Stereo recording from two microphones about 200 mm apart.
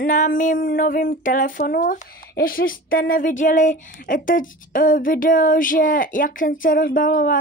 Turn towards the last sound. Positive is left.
turn(degrees=40)  # may be behind; listen again after turning